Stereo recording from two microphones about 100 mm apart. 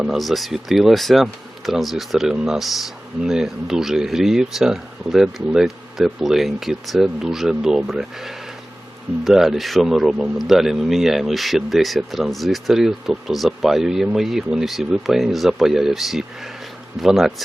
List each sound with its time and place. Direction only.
0.1 s speech: centre (ahead or behind)